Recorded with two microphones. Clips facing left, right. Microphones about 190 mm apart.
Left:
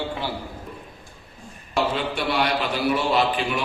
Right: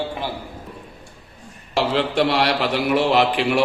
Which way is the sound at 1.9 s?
85° right.